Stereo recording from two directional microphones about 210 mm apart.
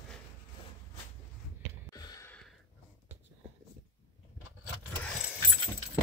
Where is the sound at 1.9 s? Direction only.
15° left (ahead or behind).